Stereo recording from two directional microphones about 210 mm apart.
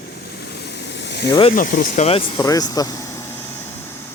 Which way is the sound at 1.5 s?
40° left (ahead or behind).